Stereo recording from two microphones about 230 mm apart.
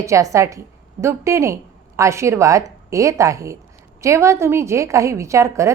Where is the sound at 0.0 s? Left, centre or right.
Centre.